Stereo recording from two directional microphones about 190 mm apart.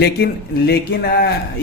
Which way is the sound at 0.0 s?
60° left (ahead or behind).